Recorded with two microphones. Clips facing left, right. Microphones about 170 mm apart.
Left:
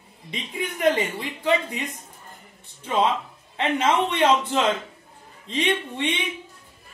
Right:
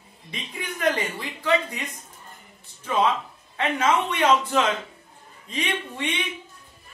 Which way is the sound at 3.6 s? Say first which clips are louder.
Left 1 dB; 25° left (ahead or behind).